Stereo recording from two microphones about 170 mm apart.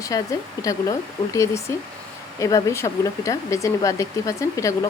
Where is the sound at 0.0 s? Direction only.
20° left (ahead or behind).